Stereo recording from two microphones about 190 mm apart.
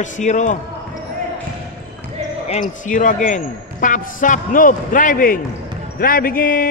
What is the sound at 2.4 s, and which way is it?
Speech, 40° left (ahead or behind).